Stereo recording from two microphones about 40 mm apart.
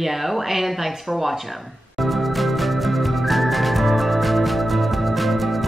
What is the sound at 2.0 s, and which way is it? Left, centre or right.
Music, centre.